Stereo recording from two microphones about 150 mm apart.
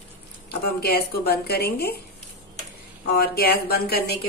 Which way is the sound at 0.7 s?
90° left.